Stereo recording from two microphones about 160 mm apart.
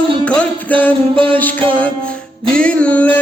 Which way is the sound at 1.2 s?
10° left (ahead or behind).